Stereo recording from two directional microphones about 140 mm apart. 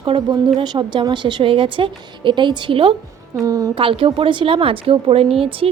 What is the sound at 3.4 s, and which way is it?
Speech, 25° right (ahead or behind).